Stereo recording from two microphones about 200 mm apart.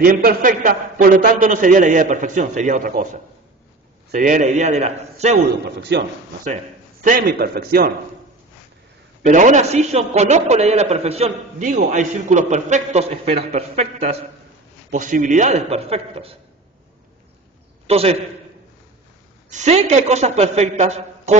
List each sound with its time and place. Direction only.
0.0 s a man's voice: 45° right (ahead or behind)
4.1 s a man's voice: 40° right (ahead or behind)
5.7 s speech: 60° right (ahead or behind)
6.4 s a man's voice: 40° right (ahead or behind)
9.2 s a man's voice: 40° right (ahead or behind)
17.8 s a man's voice: 30° right (ahead or behind)
19.5 s a man's voice: 35° right (ahead or behind)